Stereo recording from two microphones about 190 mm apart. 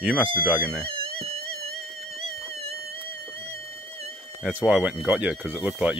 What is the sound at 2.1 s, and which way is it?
Music, 30° right (ahead or behind).